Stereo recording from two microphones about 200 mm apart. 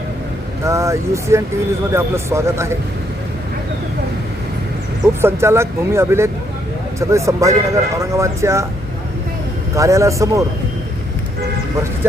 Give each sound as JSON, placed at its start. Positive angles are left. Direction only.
{"t": 0.6, "sound": "speech", "side_deg": -15}
{"t": 5.2, "sound": "speech", "side_deg": -15}
{"t": 9.7, "sound": "speech", "side_deg": -15}